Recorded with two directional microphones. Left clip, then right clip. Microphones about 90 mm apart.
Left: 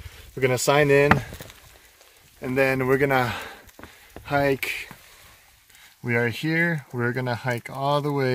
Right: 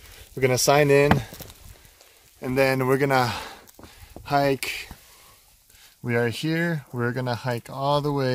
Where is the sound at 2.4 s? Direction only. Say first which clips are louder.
Even; 30° right (ahead or behind); by 4.9 s 15° right (ahead or behind).